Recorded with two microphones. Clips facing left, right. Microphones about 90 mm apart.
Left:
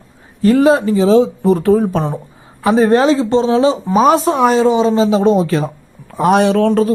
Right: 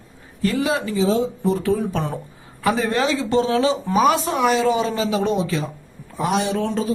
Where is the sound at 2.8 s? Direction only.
35° left (ahead or behind).